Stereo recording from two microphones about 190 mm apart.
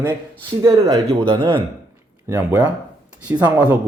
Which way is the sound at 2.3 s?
10° right (ahead or behind).